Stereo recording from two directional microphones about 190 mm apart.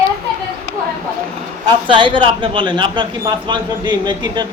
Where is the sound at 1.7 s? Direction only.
25° right (ahead or behind).